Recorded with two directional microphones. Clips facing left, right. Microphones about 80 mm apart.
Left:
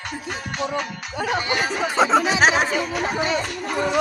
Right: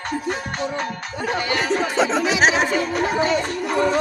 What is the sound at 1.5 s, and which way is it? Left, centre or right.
Speech, centre.